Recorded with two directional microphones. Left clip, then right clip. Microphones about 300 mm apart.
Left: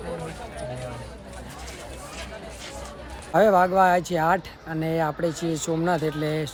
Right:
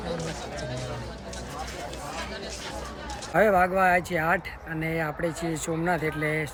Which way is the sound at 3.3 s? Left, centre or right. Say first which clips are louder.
Left 3 dB; centre.